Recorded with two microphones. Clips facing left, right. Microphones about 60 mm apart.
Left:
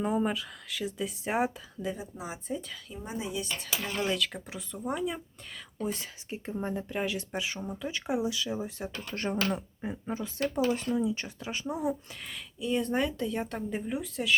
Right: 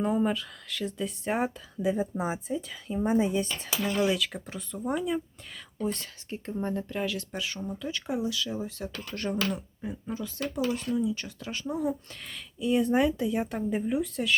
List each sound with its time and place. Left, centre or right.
0.0 s speech: centre
2.0 s speech: right
2.5 s speech: centre
3.0 s speech: right
3.8 s speech: centre
12.3 s speech: centre